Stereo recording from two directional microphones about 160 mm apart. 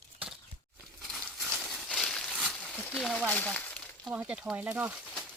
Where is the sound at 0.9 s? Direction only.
Centre (ahead or behind).